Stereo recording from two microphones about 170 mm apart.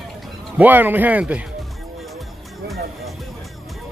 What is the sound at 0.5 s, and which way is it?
Speech, 10° right (ahead or behind).